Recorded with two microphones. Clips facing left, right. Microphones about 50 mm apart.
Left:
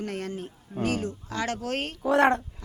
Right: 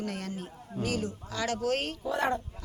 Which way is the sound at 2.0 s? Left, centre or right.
Left.